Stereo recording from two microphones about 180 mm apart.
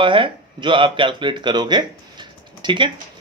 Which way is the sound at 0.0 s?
25° right (ahead or behind).